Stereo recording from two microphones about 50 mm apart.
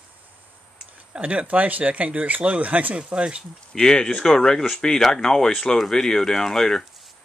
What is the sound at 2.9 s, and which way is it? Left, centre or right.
Speech, centre.